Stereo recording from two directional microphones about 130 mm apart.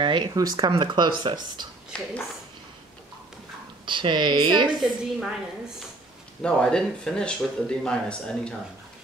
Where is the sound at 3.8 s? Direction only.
35° right (ahead or behind).